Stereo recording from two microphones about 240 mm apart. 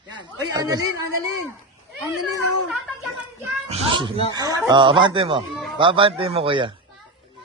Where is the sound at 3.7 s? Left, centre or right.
Right.